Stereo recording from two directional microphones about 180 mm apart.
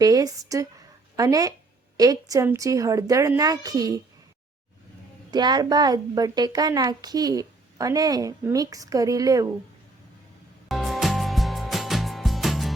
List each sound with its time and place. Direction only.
0.0 s a woman's voice: 20° right (ahead or behind)
5.3 s a woman's voice: 25° right (ahead or behind)
10.7 s music: centre (ahead or behind)